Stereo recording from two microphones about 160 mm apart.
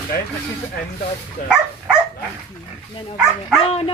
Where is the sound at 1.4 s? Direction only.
65° left (ahead or behind).